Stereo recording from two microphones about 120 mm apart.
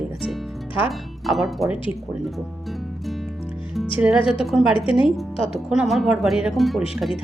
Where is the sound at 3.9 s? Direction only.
10° right (ahead or behind).